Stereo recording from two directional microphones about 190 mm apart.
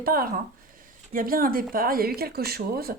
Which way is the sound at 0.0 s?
50° right (ahead or behind).